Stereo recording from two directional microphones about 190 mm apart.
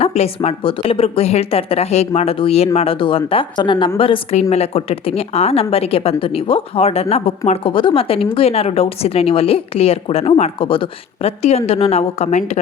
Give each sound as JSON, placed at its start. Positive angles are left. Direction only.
{"t": 0.0, "sound": "a woman's voice", "side_deg": 30}